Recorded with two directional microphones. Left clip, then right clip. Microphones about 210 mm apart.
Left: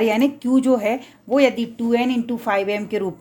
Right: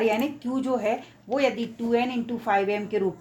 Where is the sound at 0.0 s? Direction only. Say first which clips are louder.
Left 6 dB; 50° left (ahead or behind).